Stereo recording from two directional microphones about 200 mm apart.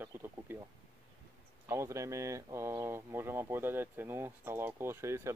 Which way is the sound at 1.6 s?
15° right (ahead or behind).